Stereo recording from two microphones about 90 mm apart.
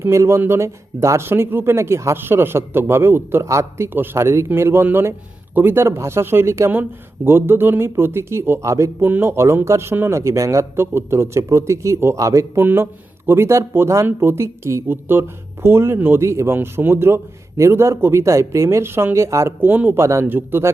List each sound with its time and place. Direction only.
0.0 s speech: 35° right (ahead or behind)
12.6 s speech: 25° right (ahead or behind)
19.6 s speech: 20° right (ahead or behind)
20.0 s speech: 30° right (ahead or behind)